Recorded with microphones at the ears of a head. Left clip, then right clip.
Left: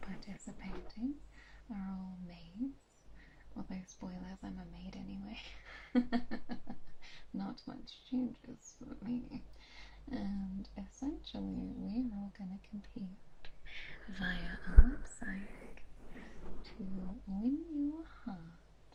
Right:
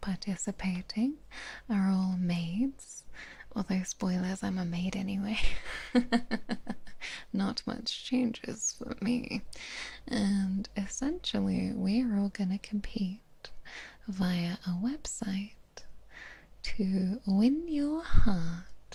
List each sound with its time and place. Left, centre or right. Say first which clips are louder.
0.0 s speech: right 13 dB; right